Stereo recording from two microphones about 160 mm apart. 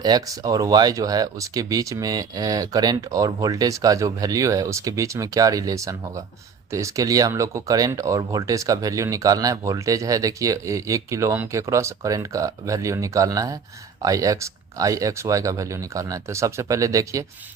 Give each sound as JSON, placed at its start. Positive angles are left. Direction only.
{"t": 0.0, "sound": "speech", "side_deg": -25}